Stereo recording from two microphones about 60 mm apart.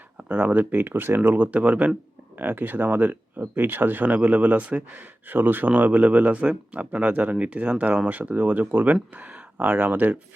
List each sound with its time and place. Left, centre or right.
0.2 s speech: right
1.4 s speech: right